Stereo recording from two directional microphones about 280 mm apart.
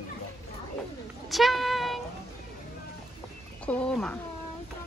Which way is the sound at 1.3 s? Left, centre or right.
Centre.